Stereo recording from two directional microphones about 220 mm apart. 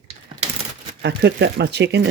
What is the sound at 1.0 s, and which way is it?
Speech, 50° right (ahead or behind).